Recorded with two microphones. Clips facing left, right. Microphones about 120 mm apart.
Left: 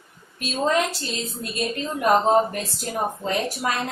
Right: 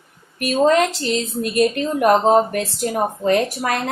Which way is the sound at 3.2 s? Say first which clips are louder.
Right 6 dB; 65° right (ahead or behind).